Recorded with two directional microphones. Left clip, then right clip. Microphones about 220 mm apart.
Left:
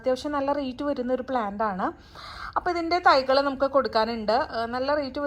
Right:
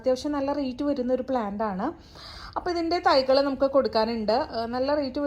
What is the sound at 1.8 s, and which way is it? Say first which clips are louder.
A woman's voice: left 2 dB; centre (ahead or behind).